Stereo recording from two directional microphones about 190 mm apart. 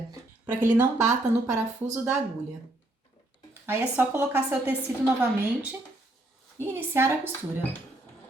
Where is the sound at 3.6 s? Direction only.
10° right (ahead or behind).